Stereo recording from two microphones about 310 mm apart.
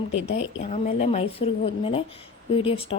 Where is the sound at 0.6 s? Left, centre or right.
Left.